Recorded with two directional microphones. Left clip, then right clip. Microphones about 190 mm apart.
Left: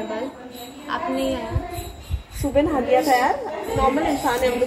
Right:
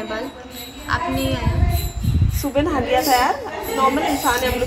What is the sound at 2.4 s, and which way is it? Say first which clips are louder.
Speech: left 1 dB; 10° right (ahead or behind).